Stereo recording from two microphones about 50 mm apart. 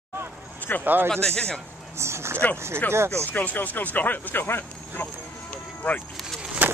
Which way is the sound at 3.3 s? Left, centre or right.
Left.